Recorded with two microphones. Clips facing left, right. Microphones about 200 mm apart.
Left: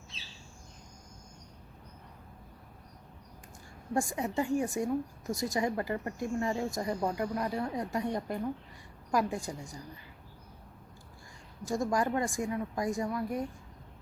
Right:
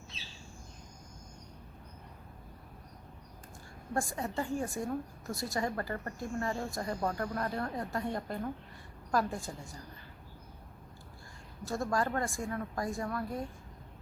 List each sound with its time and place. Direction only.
3.9 s a woman's voice: 15° left (ahead or behind)
11.6 s a woman's voice: 15° left (ahead or behind)